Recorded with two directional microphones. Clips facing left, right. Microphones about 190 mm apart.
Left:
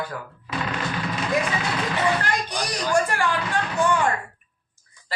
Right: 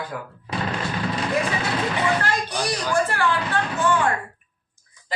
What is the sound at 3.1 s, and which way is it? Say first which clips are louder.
Speech: right 1 dB; 15° left (ahead or behind).